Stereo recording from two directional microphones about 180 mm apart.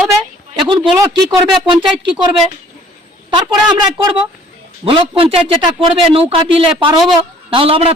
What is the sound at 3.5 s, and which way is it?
A man's voice, 25° right (ahead or behind).